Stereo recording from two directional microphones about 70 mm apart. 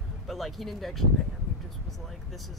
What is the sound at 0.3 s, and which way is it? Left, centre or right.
Speech, centre.